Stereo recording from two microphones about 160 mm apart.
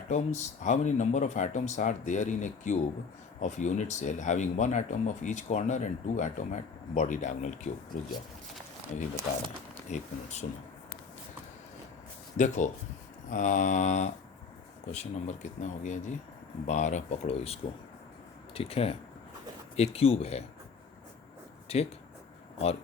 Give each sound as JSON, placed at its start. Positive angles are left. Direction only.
{"t": 0.1, "sound": "speech", "side_deg": 45}
{"t": 9.9, "sound": "speech", "side_deg": 45}
{"t": 12.4, "sound": "speech", "side_deg": 50}
{"t": 21.7, "sound": "speech", "side_deg": 40}